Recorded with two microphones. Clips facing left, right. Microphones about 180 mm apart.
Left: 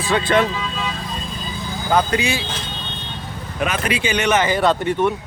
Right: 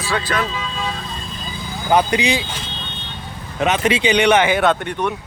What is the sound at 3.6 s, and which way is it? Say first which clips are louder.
Speech: right 4 dB; 25° right (ahead or behind).